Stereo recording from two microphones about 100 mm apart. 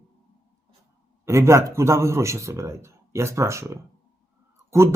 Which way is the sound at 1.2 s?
30° right (ahead or behind).